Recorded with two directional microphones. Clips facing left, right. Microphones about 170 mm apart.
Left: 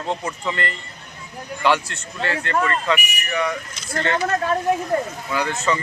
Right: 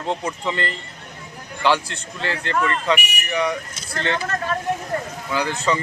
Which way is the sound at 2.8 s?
15° right (ahead or behind).